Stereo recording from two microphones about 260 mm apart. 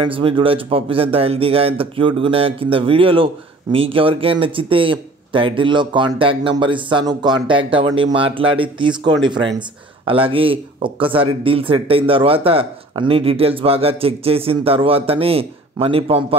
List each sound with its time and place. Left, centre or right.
0.0 s speech: centre